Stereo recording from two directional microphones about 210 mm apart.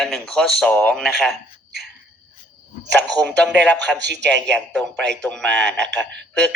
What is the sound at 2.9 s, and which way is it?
Speech, 5° left (ahead or behind).